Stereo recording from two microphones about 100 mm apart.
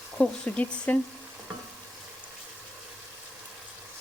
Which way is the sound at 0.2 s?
15° left (ahead or behind).